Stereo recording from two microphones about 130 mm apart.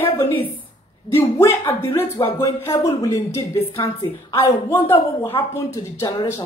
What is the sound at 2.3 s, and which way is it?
Speech, 20° left (ahead or behind).